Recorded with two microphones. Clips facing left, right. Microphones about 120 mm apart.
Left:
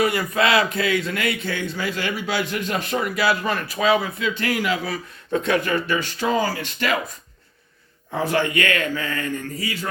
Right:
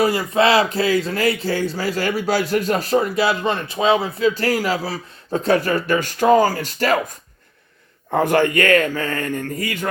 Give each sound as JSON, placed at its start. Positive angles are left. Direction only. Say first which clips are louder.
{"t": 0.0, "sound": "speech", "louder": "right 4 dB", "side_deg": -30}
{"t": 8.1, "sound": "speech", "louder": "right 5 dB", "side_deg": -50}